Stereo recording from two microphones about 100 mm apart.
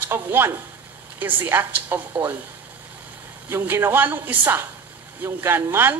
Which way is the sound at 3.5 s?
20° right (ahead or behind).